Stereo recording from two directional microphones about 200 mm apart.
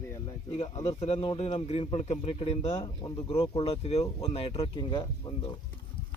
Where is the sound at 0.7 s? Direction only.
20° left (ahead or behind).